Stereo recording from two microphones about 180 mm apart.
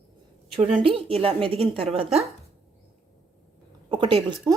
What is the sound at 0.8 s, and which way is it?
A woman's voice, 30° right (ahead or behind).